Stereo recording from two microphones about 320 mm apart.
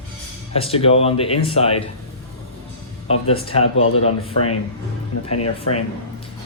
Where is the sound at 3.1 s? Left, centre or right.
Centre.